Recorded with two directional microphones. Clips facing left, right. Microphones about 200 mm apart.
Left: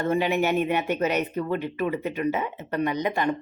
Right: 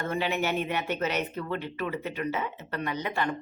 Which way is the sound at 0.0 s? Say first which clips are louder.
Left 6 dB; 15° left (ahead or behind).